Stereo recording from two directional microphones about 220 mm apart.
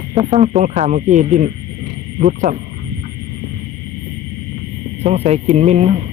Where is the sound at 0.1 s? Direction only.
20° right (ahead or behind).